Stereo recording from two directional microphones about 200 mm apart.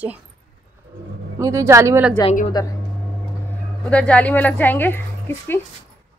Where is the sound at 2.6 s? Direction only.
20° left (ahead or behind).